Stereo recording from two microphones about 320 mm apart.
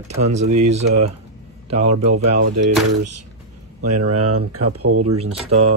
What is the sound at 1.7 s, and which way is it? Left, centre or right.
Speech, right.